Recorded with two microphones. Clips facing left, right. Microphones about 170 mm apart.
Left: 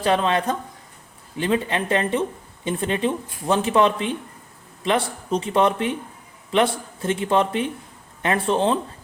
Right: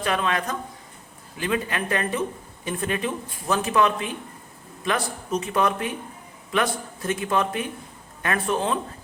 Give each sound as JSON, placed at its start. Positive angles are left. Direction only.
{"t": 0.0, "sound": "speech", "side_deg": 30}